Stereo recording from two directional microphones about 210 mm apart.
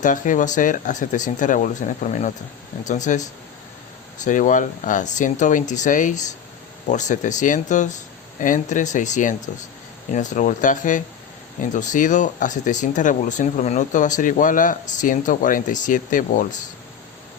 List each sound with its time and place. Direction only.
0.0 s speech: 35° left (ahead or behind)